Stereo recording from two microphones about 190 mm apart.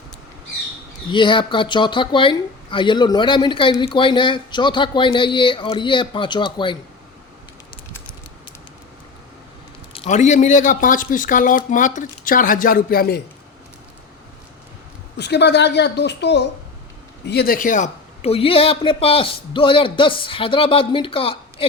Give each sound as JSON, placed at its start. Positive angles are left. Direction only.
{"t": 1.1, "sound": "speech", "side_deg": 25}
{"t": 9.9, "sound": "speech", "side_deg": 35}
{"t": 15.2, "sound": "a woman's voice", "side_deg": 60}